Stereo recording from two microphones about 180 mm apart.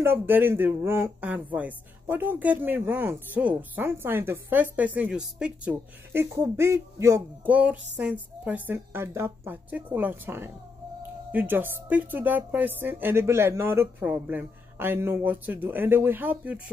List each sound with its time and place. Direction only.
0.0 s speech: 10° right (ahead or behind)